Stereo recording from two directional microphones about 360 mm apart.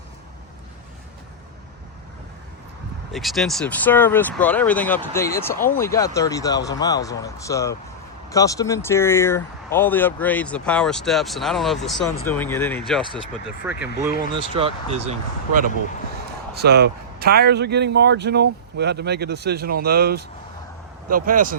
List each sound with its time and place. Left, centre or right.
3.1 s speech: centre
14.3 s speech: centre